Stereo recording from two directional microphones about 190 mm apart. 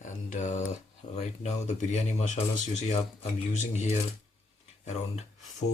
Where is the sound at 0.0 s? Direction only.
40° left (ahead or behind).